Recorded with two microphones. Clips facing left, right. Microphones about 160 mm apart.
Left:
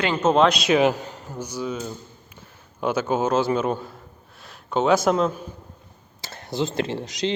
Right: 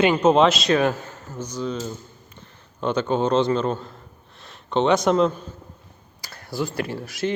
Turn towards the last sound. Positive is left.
turn(degrees=20)  # may be behind; listen again after turning